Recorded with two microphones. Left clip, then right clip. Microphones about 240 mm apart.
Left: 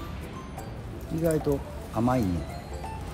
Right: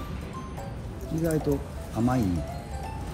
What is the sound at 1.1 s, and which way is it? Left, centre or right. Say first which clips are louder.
Speech: left 2 dB; left.